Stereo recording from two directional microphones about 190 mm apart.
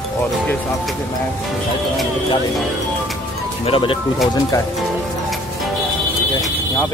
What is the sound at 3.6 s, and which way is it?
Speech, 30° left (ahead or behind).